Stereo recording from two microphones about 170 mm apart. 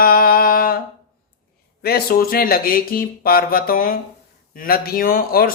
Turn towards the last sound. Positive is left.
turn(degrees=60)  # may be behind; listen again after turning